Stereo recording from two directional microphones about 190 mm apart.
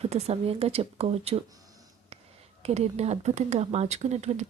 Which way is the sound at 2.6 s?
35° right (ahead or behind).